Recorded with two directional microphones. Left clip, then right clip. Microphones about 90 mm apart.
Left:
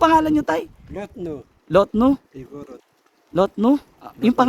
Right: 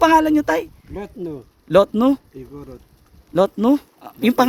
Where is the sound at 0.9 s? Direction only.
45° left (ahead or behind).